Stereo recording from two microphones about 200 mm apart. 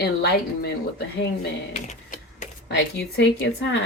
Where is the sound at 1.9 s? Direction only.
35° left (ahead or behind).